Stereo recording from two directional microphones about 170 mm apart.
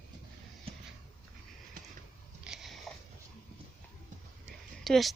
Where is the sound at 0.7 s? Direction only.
35° right (ahead or behind).